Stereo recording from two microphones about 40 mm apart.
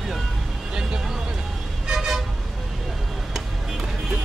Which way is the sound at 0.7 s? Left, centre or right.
Right.